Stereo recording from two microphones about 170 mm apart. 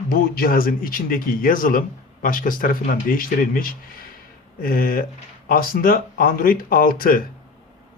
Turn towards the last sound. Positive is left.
turn(degrees=55)  # may be behind; listen again after turning